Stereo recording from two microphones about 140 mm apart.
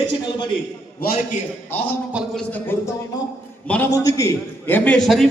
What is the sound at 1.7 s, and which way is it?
A man's voice, 15° left (ahead or behind).